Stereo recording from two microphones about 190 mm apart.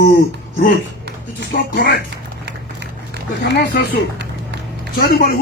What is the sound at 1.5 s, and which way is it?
Speech, 65° left (ahead or behind).